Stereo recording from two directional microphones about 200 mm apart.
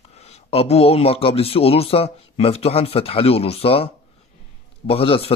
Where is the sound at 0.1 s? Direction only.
30° left (ahead or behind).